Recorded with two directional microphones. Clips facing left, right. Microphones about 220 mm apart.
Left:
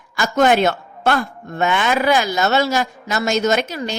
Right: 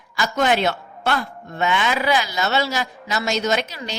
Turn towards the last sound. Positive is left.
turn(degrees=50)  # may be behind; listen again after turning